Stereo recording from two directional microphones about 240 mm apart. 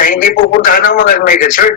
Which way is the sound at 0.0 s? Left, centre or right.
Left.